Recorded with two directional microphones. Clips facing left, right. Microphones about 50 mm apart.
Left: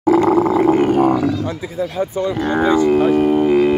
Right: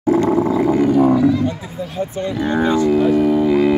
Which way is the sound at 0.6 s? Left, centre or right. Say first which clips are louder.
Left 1 dB; left.